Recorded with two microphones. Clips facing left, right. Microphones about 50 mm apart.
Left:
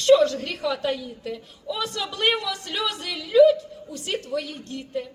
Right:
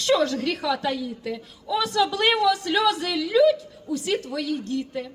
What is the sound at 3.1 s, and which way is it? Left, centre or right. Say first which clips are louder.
Speech: left 6 dB; right.